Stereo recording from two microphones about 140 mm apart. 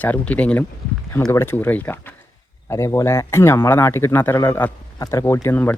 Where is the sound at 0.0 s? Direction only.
10° left (ahead or behind).